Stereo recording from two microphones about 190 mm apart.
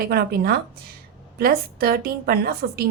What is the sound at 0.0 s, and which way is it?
A woman's voice, 55° right (ahead or behind).